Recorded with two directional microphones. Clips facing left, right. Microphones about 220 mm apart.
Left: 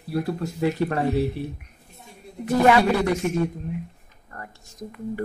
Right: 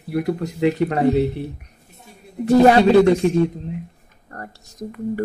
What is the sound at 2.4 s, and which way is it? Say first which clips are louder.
Speech: right 6 dB; 30° right (ahead or behind).